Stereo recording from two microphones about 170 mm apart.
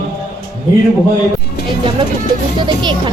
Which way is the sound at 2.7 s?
30° right (ahead or behind).